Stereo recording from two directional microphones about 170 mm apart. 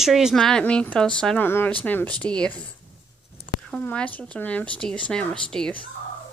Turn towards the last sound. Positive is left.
turn(degrees=5)  # may be behind; listen again after turning